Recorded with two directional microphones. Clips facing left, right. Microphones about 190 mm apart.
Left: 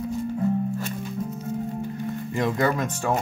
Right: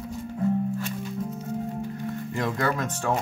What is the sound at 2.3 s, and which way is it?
Speech, 20° left (ahead or behind).